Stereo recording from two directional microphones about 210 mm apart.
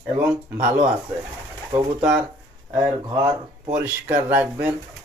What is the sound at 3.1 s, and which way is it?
Speech, 20° right (ahead or behind).